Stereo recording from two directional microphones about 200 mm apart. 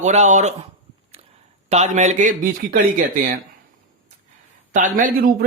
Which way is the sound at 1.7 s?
35° right (ahead or behind).